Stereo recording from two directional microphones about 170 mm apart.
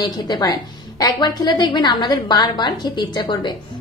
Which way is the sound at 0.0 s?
25° left (ahead or behind).